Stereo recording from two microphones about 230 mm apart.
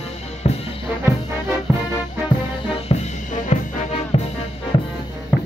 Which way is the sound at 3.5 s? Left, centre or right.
Left.